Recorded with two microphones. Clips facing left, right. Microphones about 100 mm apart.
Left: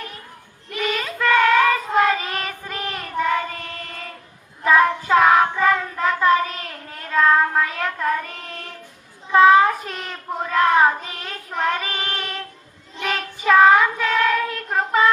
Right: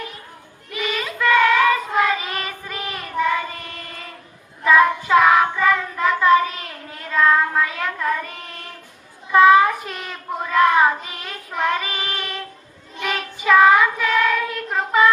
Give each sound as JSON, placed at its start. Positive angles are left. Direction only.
{"t": 0.7, "sound": "child singing", "side_deg": 40}
{"t": 4.6, "sound": "child singing", "side_deg": 35}
{"t": 9.3, "sound": "child singing", "side_deg": 35}